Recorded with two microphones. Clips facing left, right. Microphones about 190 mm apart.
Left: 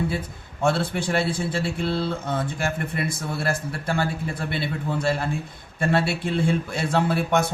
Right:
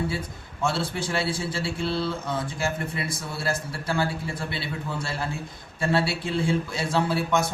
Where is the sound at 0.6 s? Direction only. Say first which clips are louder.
Left 4 dB; 55° left (ahead or behind).